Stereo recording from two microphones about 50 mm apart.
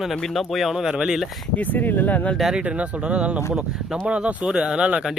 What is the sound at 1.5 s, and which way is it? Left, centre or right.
Speech, left.